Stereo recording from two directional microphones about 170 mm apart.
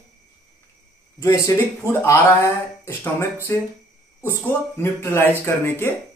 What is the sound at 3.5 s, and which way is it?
Speech, 10° left (ahead or behind).